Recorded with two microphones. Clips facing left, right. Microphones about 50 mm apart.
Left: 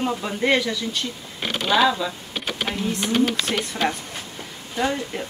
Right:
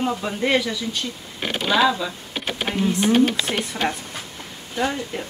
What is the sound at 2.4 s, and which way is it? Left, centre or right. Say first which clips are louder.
Typing: right 1 dB; right.